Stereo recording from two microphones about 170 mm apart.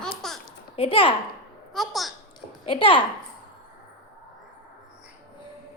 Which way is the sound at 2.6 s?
30° left (ahead or behind).